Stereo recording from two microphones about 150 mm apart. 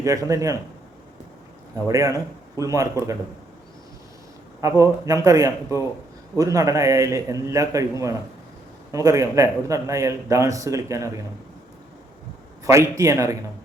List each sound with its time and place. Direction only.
0.0 s a man's voice: 20° right (ahead or behind)
1.9 s a man's voice: 20° right (ahead or behind)
4.6 s a man's voice: 20° right (ahead or behind)
12.6 s a man's voice: 20° right (ahead or behind)